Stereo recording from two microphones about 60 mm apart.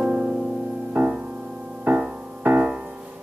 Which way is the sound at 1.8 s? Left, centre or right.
Right.